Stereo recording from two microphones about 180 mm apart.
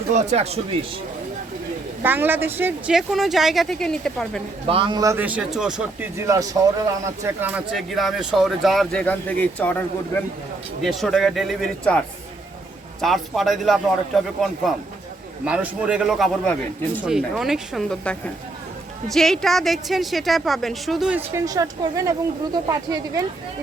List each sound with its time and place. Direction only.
0.1 s speech: 40° right (ahead or behind)
2.0 s speech: 10° right (ahead or behind)
4.7 s a man's voice: 25° right (ahead or behind); by 14.3 s centre (ahead or behind)
15.4 s speech: 5° right (ahead or behind)